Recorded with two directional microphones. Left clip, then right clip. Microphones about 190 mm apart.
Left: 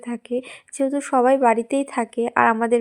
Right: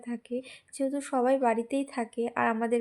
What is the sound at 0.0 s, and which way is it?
A woman's voice, 30° left (ahead or behind).